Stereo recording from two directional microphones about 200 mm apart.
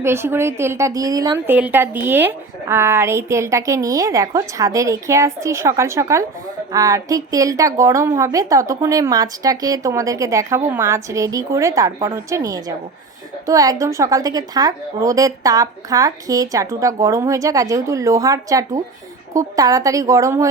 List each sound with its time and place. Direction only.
0.0 s a woman's voice: 10° right (ahead or behind)